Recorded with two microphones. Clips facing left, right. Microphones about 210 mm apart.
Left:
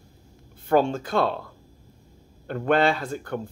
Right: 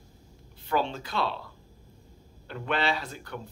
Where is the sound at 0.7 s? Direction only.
50° left (ahead or behind).